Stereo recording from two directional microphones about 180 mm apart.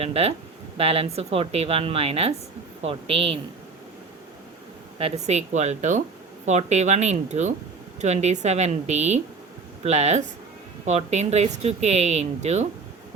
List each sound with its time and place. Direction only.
0.0 s speech: 35° right (ahead or behind)
4.9 s speech: 35° right (ahead or behind)